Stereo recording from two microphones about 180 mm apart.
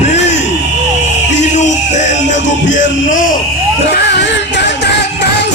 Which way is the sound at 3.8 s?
70° left (ahead or behind).